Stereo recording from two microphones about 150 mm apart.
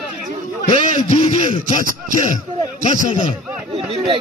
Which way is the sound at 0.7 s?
65° right (ahead or behind).